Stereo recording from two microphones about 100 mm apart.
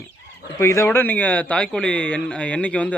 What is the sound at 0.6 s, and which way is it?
Speech, 30° left (ahead or behind).